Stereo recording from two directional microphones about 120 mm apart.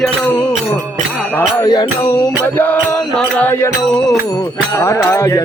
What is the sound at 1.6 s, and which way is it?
Music, 35° left (ahead or behind).